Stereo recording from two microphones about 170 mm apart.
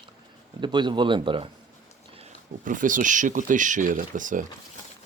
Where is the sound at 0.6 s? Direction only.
25° right (ahead or behind).